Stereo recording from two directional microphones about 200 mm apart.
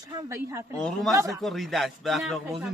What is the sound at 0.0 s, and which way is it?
Speech, 20° right (ahead or behind).